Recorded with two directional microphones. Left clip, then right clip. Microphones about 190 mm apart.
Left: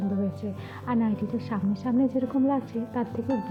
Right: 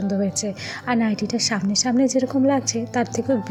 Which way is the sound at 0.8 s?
15° right (ahead or behind).